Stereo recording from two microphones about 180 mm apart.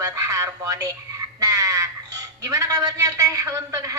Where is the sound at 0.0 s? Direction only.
20° right (ahead or behind).